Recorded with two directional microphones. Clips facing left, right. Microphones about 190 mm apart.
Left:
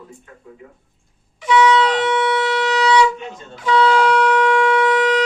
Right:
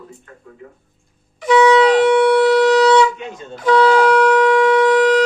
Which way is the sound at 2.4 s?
45° right (ahead or behind).